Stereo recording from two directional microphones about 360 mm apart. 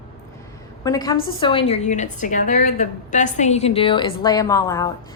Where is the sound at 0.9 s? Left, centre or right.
Centre.